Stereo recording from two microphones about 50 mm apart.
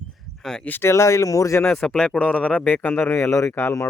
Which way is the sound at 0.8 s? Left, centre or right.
Left.